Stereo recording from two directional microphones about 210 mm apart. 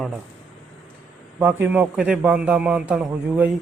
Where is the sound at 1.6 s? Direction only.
5° right (ahead or behind).